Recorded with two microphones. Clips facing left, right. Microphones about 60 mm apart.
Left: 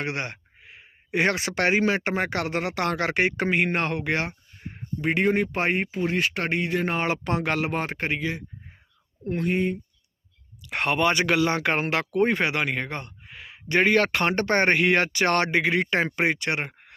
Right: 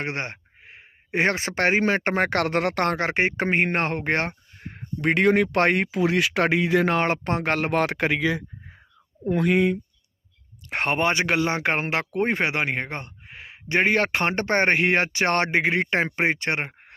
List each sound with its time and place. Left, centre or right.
0.0 s speech: right
3.0 s speech: right
4.9 s speech: right
7.0 s speech: right
7.7 s speech: right
9.5 s speech: right
10.6 s speech: right